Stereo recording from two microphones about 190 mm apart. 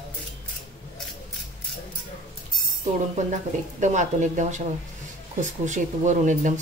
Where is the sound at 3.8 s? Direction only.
40° right (ahead or behind).